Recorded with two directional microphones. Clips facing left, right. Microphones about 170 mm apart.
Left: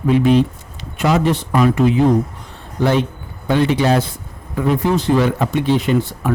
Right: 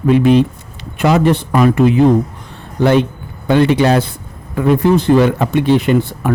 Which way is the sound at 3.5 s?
65° right (ahead or behind).